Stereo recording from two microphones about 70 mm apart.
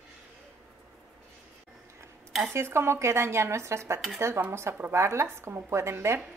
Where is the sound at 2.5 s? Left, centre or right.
Right.